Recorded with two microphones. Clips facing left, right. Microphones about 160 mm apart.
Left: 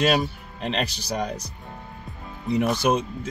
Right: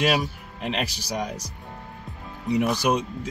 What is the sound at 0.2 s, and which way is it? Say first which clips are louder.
Speech: left 2 dB; 10° right (ahead or behind).